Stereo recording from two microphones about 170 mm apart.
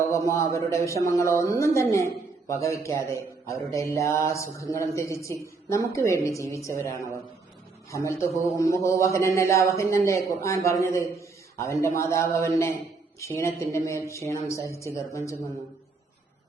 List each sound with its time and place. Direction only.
0.1 s a man's voice: 15° left (ahead or behind)